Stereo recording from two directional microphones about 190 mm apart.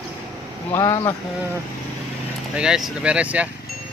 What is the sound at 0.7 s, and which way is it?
Speech, 15° left (ahead or behind).